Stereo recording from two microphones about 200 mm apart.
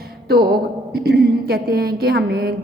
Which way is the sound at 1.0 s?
50° right (ahead or behind).